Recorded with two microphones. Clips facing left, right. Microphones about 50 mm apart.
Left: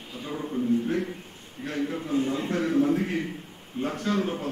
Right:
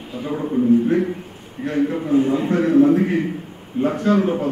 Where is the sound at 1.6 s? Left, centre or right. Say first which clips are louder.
Right 9 dB; centre.